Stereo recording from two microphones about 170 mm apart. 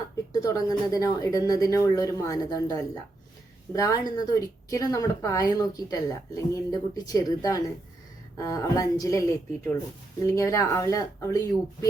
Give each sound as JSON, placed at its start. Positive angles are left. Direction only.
{"t": 0.4, "sound": "a woman's voice", "side_deg": 20}